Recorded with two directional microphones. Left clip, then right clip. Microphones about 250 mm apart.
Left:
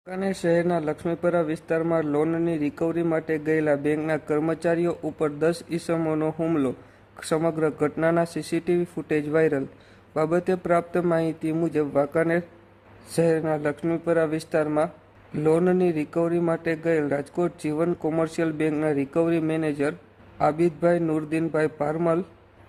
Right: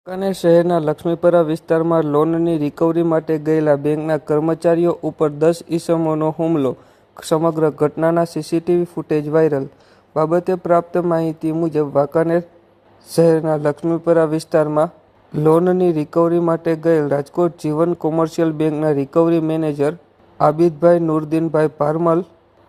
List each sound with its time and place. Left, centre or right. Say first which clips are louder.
0.0 s speech: right 8 dB; centre